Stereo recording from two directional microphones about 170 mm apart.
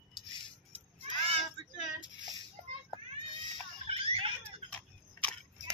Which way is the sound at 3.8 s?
35° right (ahead or behind).